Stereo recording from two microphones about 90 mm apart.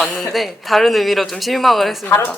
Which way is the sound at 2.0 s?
25° left (ahead or behind).